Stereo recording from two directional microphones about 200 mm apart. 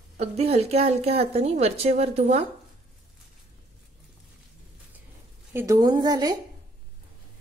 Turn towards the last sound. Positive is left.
turn(degrees=-20)  # may be behind; listen again after turning